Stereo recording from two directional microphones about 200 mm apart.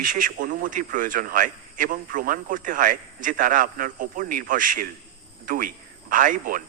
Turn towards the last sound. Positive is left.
turn(degrees=-40)  # may be behind; listen again after turning